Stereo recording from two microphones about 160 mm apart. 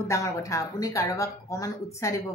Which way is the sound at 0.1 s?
20° left (ahead or behind).